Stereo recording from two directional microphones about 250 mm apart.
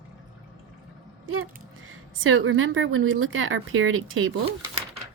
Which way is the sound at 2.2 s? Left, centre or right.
Right.